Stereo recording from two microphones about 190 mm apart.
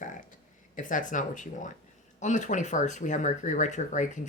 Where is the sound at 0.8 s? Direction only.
45° left (ahead or behind).